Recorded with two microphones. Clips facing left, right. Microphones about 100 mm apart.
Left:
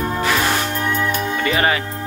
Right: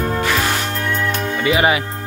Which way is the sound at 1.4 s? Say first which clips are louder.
Right 4 dB; 15° right (ahead or behind).